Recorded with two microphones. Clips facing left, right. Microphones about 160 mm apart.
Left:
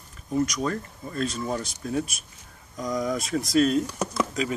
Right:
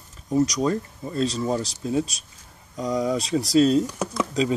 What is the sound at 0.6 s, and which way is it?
Speech, 30° right (ahead or behind).